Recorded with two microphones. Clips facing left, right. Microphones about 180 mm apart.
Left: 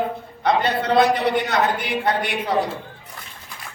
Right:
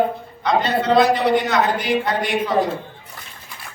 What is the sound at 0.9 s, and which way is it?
A woman's voice, 55° left (ahead or behind).